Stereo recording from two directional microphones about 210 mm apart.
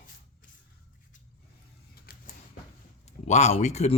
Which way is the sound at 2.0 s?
45° left (ahead or behind).